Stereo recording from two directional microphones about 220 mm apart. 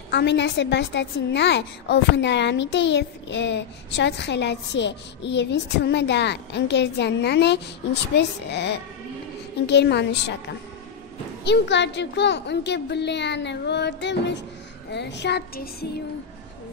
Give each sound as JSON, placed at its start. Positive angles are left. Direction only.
{"t": 0.1, "sound": "a woman's voice", "side_deg": 50}
{"t": 11.4, "sound": "a woman's voice", "side_deg": 50}